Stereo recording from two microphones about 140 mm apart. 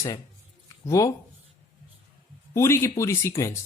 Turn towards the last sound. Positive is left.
turn(degrees=20)  # may be behind; listen again after turning